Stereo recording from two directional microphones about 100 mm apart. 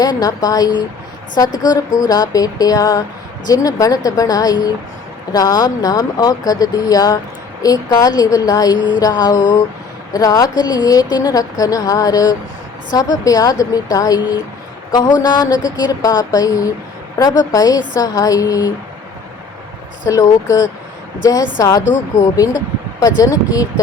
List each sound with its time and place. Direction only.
0.0 s speech: 40° left (ahead or behind)
20.1 s speech: 35° left (ahead or behind)
23.0 s speech: 40° left (ahead or behind)